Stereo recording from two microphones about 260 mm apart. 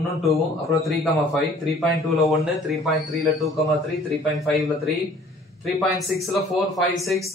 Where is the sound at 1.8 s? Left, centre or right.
Centre.